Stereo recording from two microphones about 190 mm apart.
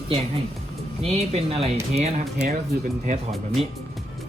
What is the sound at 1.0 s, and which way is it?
Speech, 35° right (ahead or behind).